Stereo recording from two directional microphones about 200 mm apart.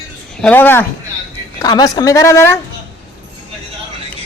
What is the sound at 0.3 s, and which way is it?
A woman's voice, 10° left (ahead or behind).